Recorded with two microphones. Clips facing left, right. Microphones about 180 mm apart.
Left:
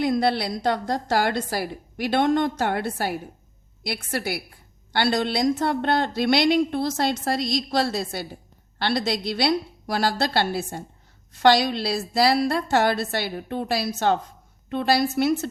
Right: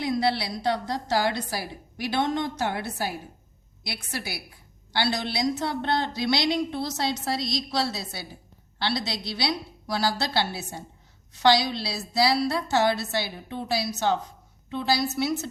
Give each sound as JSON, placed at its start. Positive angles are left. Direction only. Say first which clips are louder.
{"t": 0.0, "sound": "a woman's voice", "louder": "left 4 dB", "side_deg": 50}